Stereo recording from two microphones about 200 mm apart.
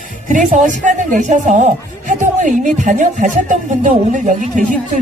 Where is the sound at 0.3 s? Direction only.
40° right (ahead or behind).